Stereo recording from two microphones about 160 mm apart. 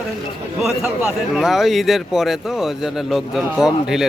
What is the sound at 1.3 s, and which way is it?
Speech, centre (ahead or behind).